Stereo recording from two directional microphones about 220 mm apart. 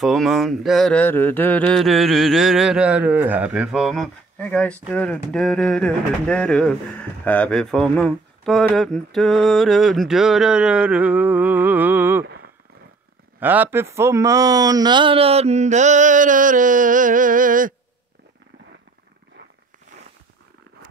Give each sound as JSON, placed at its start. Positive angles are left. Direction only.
{"t": 0.0, "sound": "speech", "side_deg": 0}
{"t": 13.4, "sound": "speech", "side_deg": -10}